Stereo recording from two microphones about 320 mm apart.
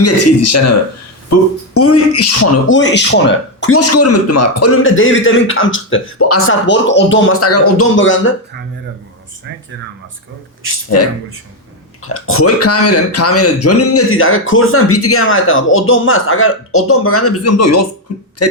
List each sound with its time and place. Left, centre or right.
0.0 s speech: left
10.8 s speech: left